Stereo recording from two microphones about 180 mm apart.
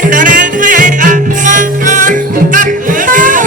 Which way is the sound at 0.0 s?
50° right (ahead or behind).